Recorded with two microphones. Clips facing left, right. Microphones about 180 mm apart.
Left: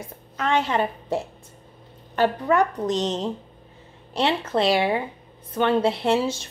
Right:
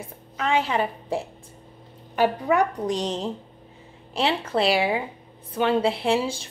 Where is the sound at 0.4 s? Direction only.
5° right (ahead or behind).